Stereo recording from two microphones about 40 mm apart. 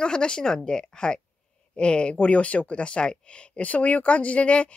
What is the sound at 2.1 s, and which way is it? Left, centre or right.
A woman's voice, left.